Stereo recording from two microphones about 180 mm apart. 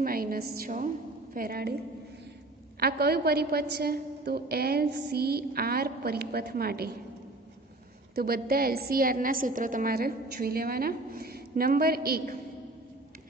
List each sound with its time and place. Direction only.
0.0 s a woman's voice: 55° right (ahead or behind)
2.8 s a woman's voice: 60° right (ahead or behind)
8.1 s a woman's voice: 55° right (ahead or behind)